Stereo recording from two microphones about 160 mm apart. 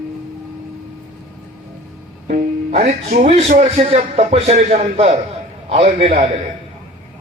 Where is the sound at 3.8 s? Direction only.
35° right (ahead or behind).